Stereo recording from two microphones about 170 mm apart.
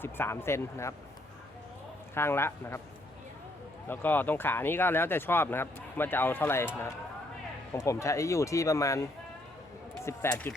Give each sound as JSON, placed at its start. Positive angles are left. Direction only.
{"t": 0.0, "sound": "speech", "side_deg": 15}
{"t": 2.1, "sound": "speech", "side_deg": 15}
{"t": 3.8, "sound": "speech", "side_deg": 10}